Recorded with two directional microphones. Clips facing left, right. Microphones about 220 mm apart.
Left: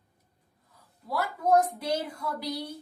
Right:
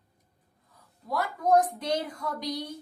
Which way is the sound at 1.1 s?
10° left (ahead or behind).